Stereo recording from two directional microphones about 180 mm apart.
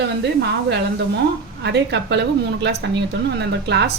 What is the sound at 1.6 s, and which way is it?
Speech, 75° right (ahead or behind).